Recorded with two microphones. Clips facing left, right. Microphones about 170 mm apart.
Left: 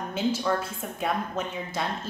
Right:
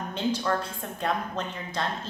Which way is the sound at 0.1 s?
5° left (ahead or behind).